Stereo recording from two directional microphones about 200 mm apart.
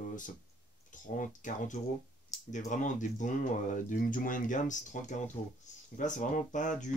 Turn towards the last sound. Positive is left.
turn(degrees=40)  # may be behind; listen again after turning